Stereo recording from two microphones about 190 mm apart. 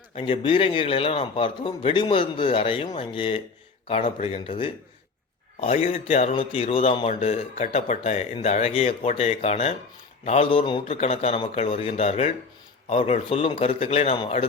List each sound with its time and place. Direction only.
0.2 s a man's voice: 30° left (ahead or behind)